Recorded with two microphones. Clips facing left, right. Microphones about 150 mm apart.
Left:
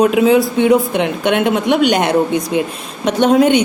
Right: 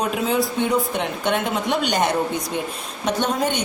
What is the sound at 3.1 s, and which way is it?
Speech, 90° left.